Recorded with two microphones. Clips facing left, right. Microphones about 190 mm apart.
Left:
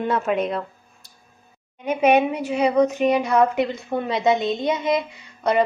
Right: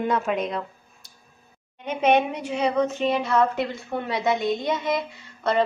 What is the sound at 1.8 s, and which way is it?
A woman's voice, 10° left (ahead or behind).